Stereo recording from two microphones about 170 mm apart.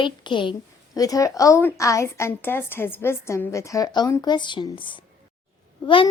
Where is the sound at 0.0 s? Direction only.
30° left (ahead or behind).